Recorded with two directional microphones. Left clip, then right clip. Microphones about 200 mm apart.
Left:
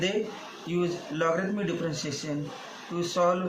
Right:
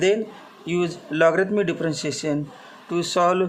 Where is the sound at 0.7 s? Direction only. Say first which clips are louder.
Right 5 dB; 45° right (ahead or behind).